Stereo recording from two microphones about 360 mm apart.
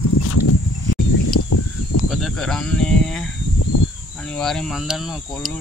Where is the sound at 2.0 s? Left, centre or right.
Centre.